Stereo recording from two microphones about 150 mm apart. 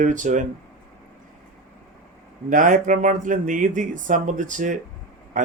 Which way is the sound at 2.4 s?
60° right (ahead or behind).